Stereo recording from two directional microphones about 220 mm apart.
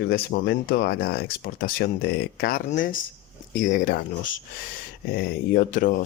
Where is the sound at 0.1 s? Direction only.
45° left (ahead or behind).